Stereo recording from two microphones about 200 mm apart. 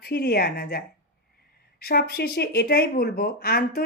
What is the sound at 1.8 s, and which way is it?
A woman's voice, 50° left (ahead or behind).